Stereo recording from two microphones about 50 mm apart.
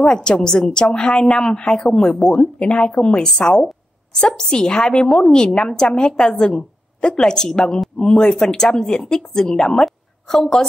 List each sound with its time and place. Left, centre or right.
0.0 s a woman's voice: centre